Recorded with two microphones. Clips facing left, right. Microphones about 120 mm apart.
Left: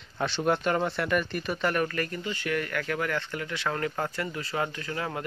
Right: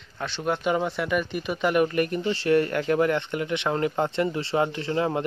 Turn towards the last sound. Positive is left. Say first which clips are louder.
# right 8 dB
turn(degrees=-25)  # may be behind; listen again after turning